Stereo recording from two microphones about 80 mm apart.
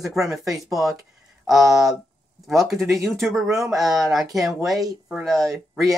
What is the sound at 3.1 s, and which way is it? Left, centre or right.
Speech, centre.